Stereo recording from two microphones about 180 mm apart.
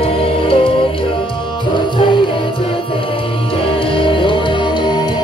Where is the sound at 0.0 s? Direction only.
30° left (ahead or behind).